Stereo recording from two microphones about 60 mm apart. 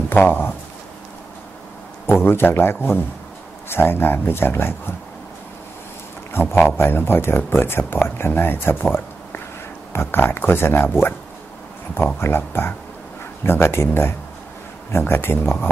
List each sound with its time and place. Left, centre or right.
0.1 s speech: left
2.0 s speech: left
6.3 s a man's voice: left
9.9 s speech: left
12.2 s speech: left